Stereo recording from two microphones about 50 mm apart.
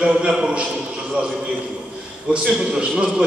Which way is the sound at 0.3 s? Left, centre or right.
Centre.